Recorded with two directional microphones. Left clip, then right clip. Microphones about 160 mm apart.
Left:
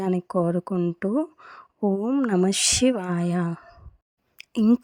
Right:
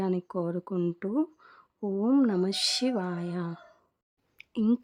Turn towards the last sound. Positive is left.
turn(degrees=25)  # may be behind; listen again after turning